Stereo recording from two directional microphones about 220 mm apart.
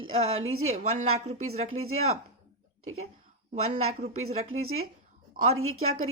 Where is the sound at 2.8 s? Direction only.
75° right (ahead or behind).